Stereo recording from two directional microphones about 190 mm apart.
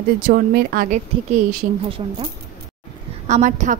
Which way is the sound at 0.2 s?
50° right (ahead or behind).